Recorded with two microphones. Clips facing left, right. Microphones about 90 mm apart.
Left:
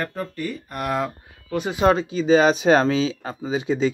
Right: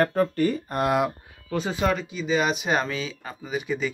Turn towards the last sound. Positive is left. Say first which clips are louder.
# left 6 dB
turn(degrees=25)  # may be behind; listen again after turning